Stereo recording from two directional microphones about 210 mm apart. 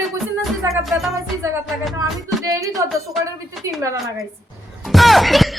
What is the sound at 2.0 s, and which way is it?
Speech, 15° right (ahead or behind).